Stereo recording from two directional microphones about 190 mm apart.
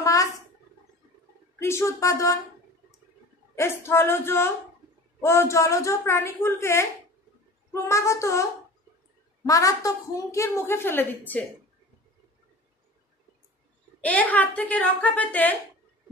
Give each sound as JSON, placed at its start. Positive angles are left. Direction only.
{"t": 0.0, "sound": "a sound", "side_deg": 15}
{"t": 1.6, "sound": "a woman's voice", "side_deg": 15}
{"t": 3.5, "sound": "a woman's voice", "side_deg": 15}
{"t": 9.5, "sound": "a woman's voice", "side_deg": 15}
{"t": 14.0, "sound": "a woman's voice", "side_deg": 5}